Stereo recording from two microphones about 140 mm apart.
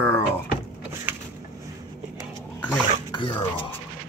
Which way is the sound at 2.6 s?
35° left (ahead or behind).